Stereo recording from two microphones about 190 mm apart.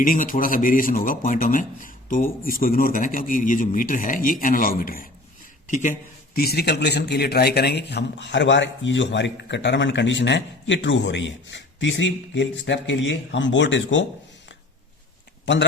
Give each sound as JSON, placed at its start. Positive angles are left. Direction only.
{"t": 0.0, "sound": "a man's voice", "side_deg": 45}